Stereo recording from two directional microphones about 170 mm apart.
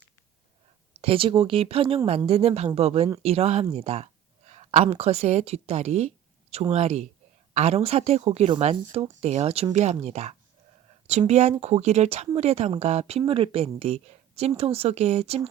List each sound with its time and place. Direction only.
1.0 s speech: 30° right (ahead or behind)